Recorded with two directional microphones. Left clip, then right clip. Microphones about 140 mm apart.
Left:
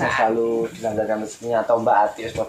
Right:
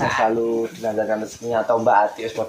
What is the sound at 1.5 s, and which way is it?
Speech, 30° right (ahead or behind).